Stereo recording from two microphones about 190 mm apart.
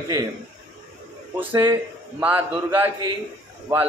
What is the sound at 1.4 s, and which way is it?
A man's voice, 10° right (ahead or behind).